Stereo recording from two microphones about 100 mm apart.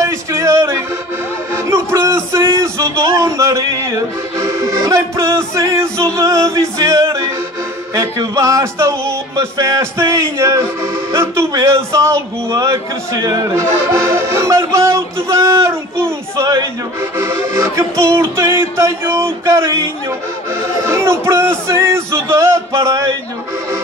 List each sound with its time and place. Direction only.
0.0 s music: 30° right (ahead or behind)
1.5 s a sound: 25° right (ahead or behind)
4.4 s a man's voice: 30° right (ahead or behind)